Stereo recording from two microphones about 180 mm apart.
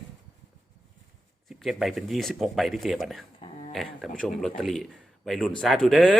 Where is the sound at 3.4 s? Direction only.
35° left (ahead or behind).